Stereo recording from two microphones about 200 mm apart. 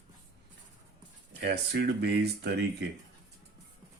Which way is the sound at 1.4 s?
55° right (ahead or behind).